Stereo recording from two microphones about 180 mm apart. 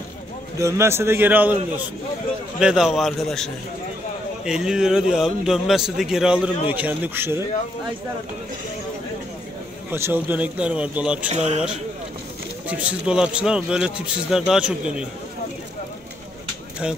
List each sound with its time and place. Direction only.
0.6 s a man's voice: 15° right (ahead or behind)
2.6 s speech: 5° right (ahead or behind)
4.5 s a man's voice: 5° right (ahead or behind)
9.8 s a man's voice: 10° right (ahead or behind)
11.2 s speech: 40° right (ahead or behind)
12.6 s speech: 5° right (ahead or behind)